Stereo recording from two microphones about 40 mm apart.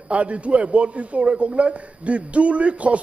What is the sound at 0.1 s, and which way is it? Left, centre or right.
A man's voice, right.